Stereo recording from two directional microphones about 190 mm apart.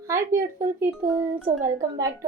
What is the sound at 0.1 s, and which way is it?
A woman's voice, 15° right (ahead or behind).